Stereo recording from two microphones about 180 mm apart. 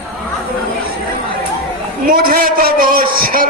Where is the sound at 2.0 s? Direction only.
55° right (ahead or behind).